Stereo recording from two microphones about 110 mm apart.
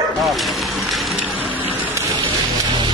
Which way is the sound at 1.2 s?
15° right (ahead or behind).